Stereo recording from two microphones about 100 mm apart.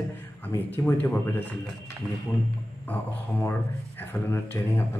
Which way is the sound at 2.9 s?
15° left (ahead or behind).